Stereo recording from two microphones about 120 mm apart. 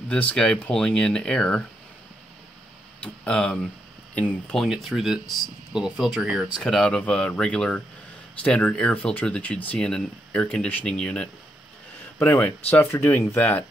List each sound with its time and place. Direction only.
0.1 s speech: 10° left (ahead or behind)
3.0 s speech: 10° left (ahead or behind)